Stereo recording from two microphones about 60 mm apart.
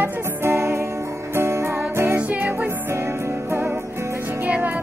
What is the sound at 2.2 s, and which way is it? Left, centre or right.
Music, right.